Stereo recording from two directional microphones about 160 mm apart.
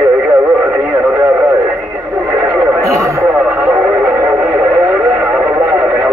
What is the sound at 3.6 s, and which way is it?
Music, 10° right (ahead or behind).